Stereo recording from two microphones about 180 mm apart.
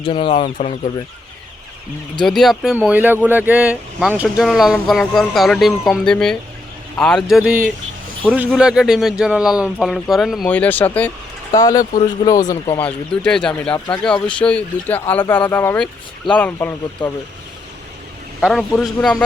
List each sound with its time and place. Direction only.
0.0 s speech: 30° left (ahead or behind)
2.2 s speech: centre (ahead or behind)
11.5 s speech: 20° left (ahead or behind)
12.7 s speech: 5° left (ahead or behind)
17.0 s speech: 25° left (ahead or behind)
18.3 s speech: centre (ahead or behind)